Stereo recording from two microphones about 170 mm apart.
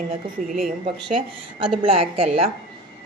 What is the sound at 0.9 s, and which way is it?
Speech, 30° right (ahead or behind).